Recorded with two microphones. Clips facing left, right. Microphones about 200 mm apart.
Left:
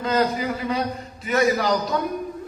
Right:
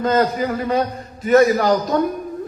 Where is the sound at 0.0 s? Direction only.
45° right (ahead or behind).